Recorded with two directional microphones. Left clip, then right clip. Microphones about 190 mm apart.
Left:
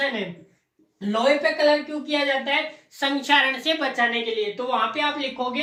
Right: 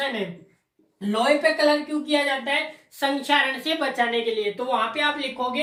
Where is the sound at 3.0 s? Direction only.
30° left (ahead or behind).